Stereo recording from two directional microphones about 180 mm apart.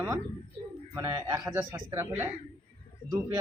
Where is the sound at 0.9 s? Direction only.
20° right (ahead or behind).